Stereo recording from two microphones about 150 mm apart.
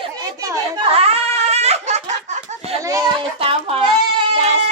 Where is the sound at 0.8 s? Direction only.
40° right (ahead or behind).